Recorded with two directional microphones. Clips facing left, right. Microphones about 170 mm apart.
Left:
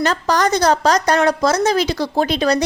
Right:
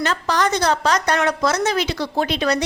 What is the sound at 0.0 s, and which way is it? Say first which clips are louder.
A woman's voice: left 3 dB; 40° left (ahead or behind).